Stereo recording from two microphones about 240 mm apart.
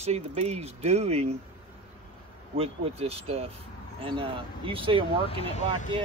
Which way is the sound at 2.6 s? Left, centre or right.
Right.